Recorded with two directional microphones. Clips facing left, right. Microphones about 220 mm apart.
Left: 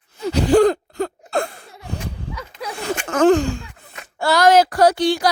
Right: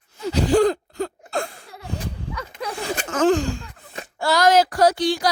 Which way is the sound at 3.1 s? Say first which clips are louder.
Left 4 dB; 60° left (ahead or behind).